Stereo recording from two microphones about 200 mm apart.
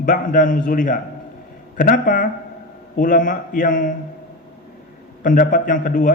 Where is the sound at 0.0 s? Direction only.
40° left (ahead or behind).